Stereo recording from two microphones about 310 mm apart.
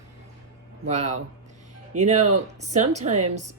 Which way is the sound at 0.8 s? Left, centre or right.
Right.